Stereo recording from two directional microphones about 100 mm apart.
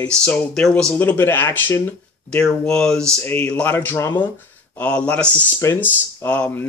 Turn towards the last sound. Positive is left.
turn(degrees=15)  # may be behind; listen again after turning